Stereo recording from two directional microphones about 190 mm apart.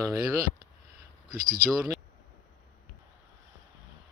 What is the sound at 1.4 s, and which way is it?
Speech, 45° right (ahead or behind).